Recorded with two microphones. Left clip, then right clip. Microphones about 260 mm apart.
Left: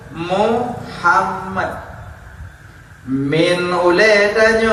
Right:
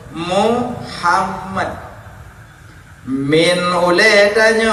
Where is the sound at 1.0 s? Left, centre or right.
Right.